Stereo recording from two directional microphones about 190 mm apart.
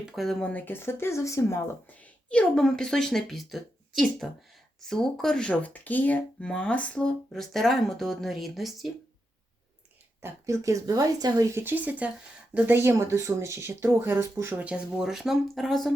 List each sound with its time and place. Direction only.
0.0 s speech: centre (ahead or behind)
10.2 s speech: 15° right (ahead or behind)